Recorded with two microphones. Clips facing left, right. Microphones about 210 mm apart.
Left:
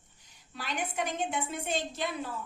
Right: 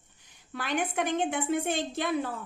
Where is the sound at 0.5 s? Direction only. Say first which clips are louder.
Right 5 dB; 55° right (ahead or behind).